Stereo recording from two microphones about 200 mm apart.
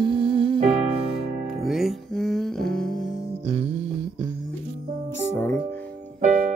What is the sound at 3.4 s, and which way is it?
Music, 25° right (ahead or behind).